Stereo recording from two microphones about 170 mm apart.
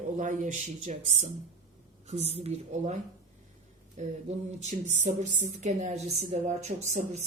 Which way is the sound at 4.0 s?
45° right (ahead or behind).